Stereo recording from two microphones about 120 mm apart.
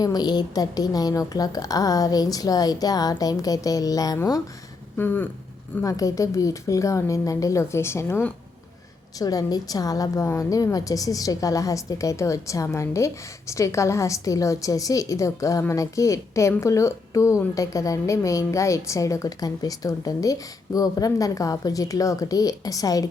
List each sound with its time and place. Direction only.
0.0 s a woman's voice: 35° left (ahead or behind)
4.9 s speech: 15° left (ahead or behind)
5.8 s a woman's voice: 30° left (ahead or behind)
9.1 s a woman's voice: 30° left (ahead or behind)